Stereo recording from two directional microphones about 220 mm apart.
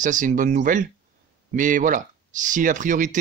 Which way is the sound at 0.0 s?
35° right (ahead or behind).